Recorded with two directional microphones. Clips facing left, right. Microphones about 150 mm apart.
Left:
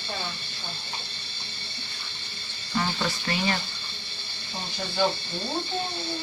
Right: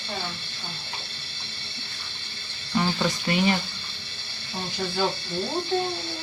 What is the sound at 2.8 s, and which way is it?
Speech, 20° right (ahead or behind).